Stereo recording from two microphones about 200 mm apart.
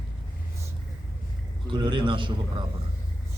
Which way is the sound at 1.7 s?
25° right (ahead or behind).